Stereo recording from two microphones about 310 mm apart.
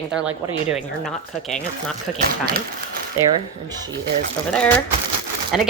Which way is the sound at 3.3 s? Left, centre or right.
Centre.